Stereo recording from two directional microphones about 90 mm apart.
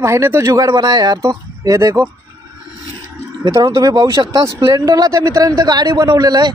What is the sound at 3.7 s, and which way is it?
Speech, 40° right (ahead or behind).